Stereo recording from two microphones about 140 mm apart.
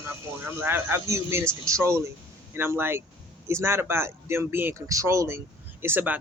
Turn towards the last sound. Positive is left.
turn(degrees=-15)  # may be behind; listen again after turning